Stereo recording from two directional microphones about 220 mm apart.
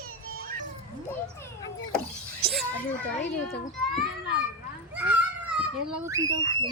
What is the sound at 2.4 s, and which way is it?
Children playing, 5° left (ahead or behind).